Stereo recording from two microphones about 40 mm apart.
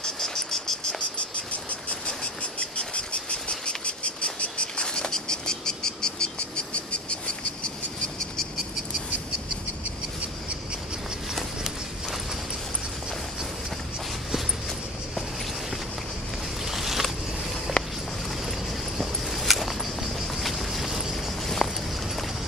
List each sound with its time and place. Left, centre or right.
0.0 s cricket: centre
0.9 s cricket: left
11.3 s run: centre
16.6 s boat: centre
17.8 s a sound: left
18.9 s a sound: centre
21.6 s walk: centre